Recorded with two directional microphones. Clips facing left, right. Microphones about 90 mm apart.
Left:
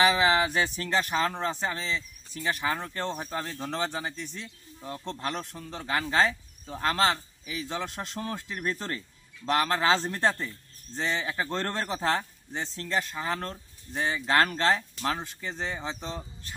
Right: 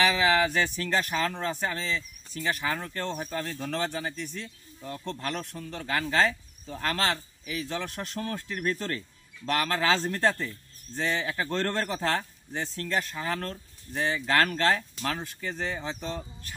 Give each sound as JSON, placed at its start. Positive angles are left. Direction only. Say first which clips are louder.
{"t": 0.0, "sound": "speech", "louder": "left 1 dB", "side_deg": 25}